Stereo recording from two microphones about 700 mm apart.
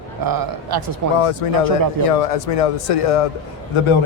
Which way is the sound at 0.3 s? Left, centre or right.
Right.